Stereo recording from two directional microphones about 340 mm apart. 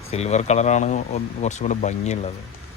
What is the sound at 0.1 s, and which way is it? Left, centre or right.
Speech, centre.